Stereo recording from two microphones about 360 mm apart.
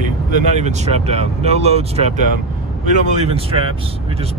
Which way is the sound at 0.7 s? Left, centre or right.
Centre.